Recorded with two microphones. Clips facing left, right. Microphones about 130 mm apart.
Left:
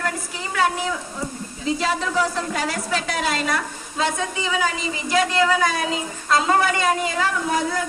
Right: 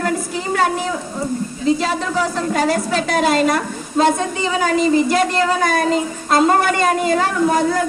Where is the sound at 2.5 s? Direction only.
50° right (ahead or behind).